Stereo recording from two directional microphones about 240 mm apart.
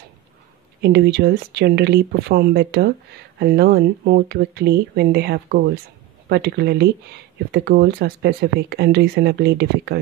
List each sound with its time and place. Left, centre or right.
0.7 s speech: right